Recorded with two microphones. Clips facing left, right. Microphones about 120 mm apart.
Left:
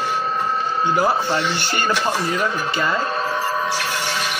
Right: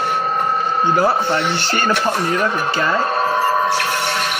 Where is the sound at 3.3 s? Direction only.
60° right (ahead or behind).